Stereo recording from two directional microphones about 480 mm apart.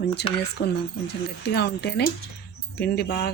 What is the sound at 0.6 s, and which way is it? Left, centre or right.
Speech, centre.